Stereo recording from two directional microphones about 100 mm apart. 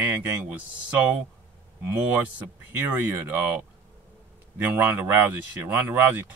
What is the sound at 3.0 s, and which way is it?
Speech, 20° right (ahead or behind).